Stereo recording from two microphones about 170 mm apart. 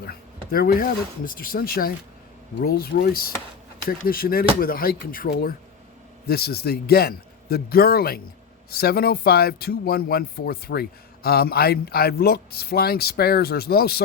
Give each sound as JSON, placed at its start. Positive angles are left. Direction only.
{"t": 0.0, "sound": "speech", "side_deg": 65}